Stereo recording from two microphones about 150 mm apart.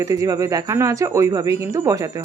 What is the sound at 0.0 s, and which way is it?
A woman's voice, 20° right (ahead or behind).